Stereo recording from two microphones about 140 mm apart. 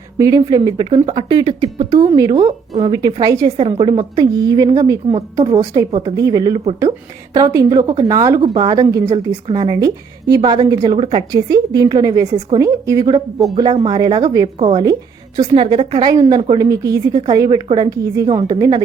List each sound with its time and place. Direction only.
0.2 s speech: 25° right (ahead or behind)
2.0 s a woman's voice: 25° right (ahead or behind)
2.3 s speech: 50° right (ahead or behind)
2.9 s a woman's voice: 30° right (ahead or behind)
3.6 s a woman's voice: 40° right (ahead or behind); by 9.1 s 25° right (ahead or behind)
9.1 s a woman's voice: 35° right (ahead or behind)
10.9 s speech: 40° right (ahead or behind)
11.3 s a woman's voice: 25° right (ahead or behind)
14.4 s speech: 50° right (ahead or behind)
15.5 s speech: 35° right (ahead or behind)
16.0 s a woman's voice: 25° right (ahead or behind)